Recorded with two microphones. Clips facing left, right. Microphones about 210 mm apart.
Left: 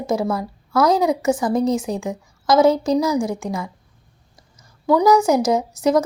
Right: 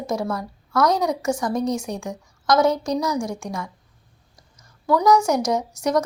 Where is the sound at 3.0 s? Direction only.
5° left (ahead or behind).